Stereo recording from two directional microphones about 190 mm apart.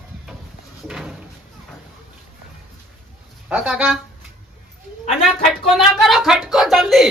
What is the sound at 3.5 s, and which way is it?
Speech, 5° right (ahead or behind).